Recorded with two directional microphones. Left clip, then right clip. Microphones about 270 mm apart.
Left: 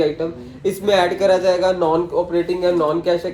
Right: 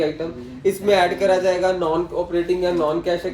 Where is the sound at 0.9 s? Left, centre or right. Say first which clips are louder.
Left 2 dB; centre.